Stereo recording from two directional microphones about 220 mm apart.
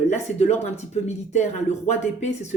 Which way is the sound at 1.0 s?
30° left (ahead or behind).